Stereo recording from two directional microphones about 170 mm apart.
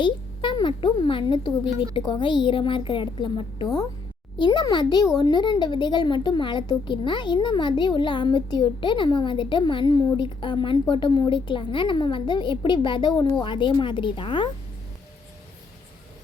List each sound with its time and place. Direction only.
0.0 s speech: 30° left (ahead or behind)